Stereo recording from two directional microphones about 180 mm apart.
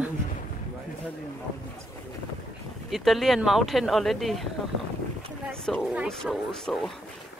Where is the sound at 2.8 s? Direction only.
Centre (ahead or behind).